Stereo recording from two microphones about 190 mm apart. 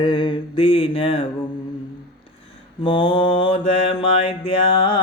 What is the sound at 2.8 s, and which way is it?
Mantra, 25° left (ahead or behind).